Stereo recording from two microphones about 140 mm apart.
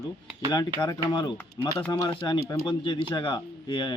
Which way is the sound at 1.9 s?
30° left (ahead or behind).